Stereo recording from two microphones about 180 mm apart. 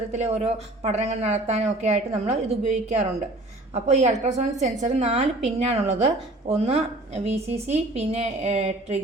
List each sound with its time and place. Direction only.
0.1 s a woman's voice: 35° right (ahead or behind)